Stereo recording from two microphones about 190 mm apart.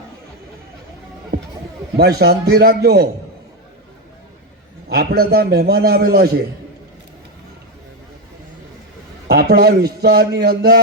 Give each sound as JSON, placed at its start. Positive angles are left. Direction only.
{"t": 1.3, "sound": "chatter", "side_deg": -55}
{"t": 2.0, "sound": "a man's voice", "side_deg": -55}
{"t": 4.9, "sound": "a man's voice", "side_deg": -55}
{"t": 9.2, "sound": "a man's voice", "side_deg": -55}